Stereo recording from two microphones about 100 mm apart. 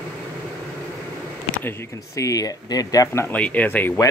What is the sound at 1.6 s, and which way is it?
Speech, 25° left (ahead or behind).